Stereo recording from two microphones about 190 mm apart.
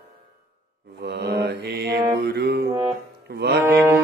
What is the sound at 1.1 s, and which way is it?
Mantra, 60° right (ahead or behind).